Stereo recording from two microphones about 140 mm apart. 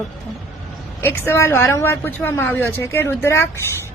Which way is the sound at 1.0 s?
15° left (ahead or behind).